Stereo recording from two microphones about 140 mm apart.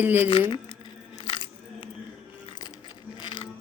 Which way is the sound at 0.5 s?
40° left (ahead or behind).